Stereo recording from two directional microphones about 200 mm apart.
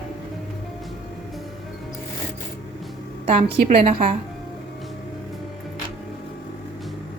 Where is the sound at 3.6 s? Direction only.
30° right (ahead or behind).